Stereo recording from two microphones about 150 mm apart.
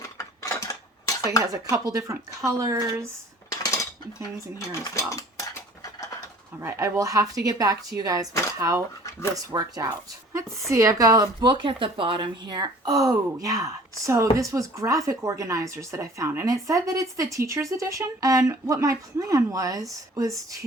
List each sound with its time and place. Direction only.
0.0 s dishes: 20° left (ahead or behind)
1.4 s speech: 20° right (ahead or behind)
3.5 s cutlery: 20° left (ahead or behind)
4.5 s mechanisms: 20° left (ahead or behind)
6.6 s speech: 20° right (ahead or behind)
11.6 s speech: 35° right (ahead or behind)